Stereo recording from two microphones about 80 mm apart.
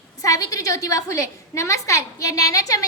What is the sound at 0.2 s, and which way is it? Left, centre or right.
A woman's voice, left.